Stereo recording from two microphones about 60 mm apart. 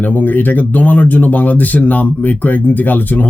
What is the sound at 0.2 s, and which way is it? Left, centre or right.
Speech, left.